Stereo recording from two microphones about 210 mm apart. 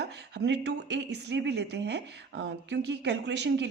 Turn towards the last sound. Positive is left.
turn(degrees=-55)  # may be behind; listen again after turning